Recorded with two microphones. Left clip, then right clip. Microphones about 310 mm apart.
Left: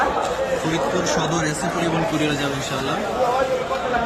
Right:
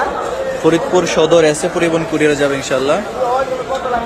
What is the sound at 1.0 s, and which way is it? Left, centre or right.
A man's voice, centre.